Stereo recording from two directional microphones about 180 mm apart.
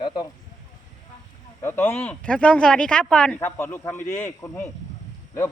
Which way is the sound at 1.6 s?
10° left (ahead or behind).